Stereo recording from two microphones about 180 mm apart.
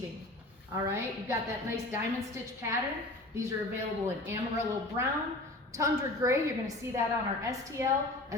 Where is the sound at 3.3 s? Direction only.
20° right (ahead or behind).